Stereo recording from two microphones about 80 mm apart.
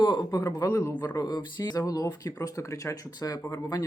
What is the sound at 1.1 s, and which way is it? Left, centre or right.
Speech, left.